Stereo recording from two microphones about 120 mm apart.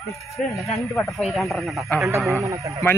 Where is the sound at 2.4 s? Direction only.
25° right (ahead or behind).